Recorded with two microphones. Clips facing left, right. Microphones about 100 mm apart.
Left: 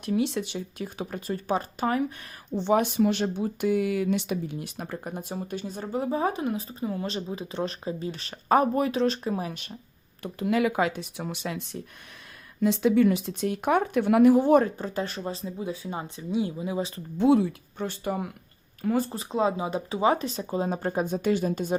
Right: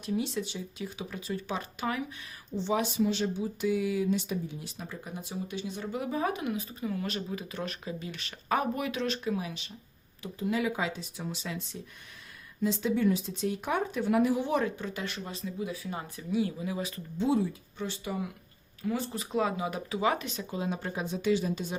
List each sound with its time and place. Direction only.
0.0 s speech: 65° left (ahead or behind); by 2.1 s 45° left (ahead or behind)
2.6 s speech: 55° left (ahead or behind)
10.2 s speech: 70° left (ahead or behind)
14.3 s speech: 45° left (ahead or behind); by 17.0 s 25° left (ahead or behind)
17.2 s speech: 70° left (ahead or behind); by 19.1 s 50° left (ahead or behind)
19.1 s speech: 30° left (ahead or behind); by 21.8 s 50° left (ahead or behind)